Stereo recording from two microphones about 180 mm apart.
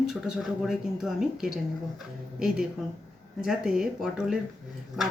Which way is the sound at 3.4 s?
Centre (ahead or behind).